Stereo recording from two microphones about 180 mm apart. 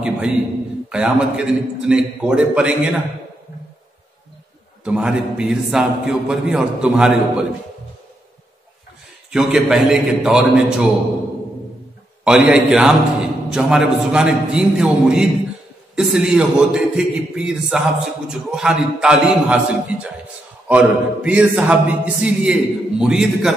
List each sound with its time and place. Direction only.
0.8 s a man's voice: 5° right (ahead or behind)
4.8 s a man's voice: 5° right (ahead or behind)
9.3 s a man's voice: 5° right (ahead or behind)
12.3 s a man's voice: 5° right (ahead or behind)